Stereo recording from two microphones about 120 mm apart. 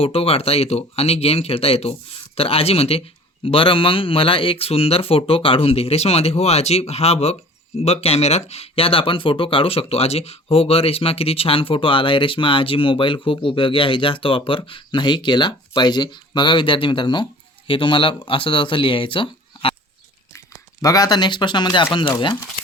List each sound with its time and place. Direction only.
0.0 s speech: 55° left (ahead or behind)
20.8 s speech: 30° left (ahead or behind)